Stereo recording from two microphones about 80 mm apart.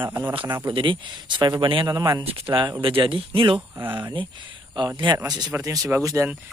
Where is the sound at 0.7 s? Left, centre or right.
Right.